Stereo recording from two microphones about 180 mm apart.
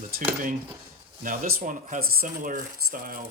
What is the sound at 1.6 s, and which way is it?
Speech, 45° right (ahead or behind).